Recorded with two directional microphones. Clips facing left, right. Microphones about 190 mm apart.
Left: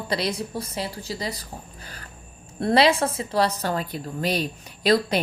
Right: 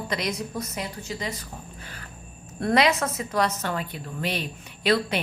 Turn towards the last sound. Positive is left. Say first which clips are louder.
# left 3 dB
turn(degrees=40)  # may be behind; listen again after turning